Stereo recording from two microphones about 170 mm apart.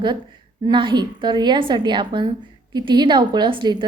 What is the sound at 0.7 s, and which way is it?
A woman's voice, 30° right (ahead or behind).